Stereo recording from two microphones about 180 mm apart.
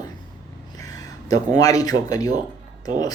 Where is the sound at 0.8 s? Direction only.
20° left (ahead or behind).